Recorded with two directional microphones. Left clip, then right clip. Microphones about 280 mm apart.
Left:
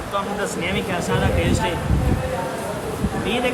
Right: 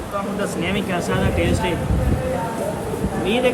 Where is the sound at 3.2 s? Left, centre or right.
Centre.